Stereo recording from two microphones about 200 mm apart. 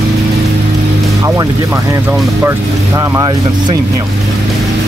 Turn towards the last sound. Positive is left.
turn(degrees=-20)  # may be behind; listen again after turning